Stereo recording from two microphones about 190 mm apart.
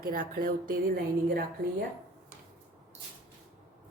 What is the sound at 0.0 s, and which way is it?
A woman's voice, 45° right (ahead or behind).